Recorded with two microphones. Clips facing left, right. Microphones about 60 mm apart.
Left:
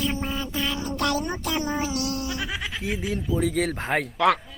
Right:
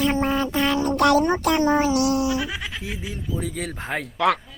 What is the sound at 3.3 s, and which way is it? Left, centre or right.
Speech, left.